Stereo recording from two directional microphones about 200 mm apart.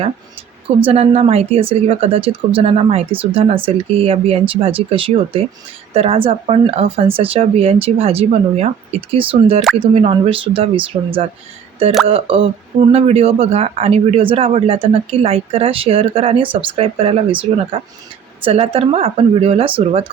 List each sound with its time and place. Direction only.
0.8 s speech: 30° right (ahead or behind)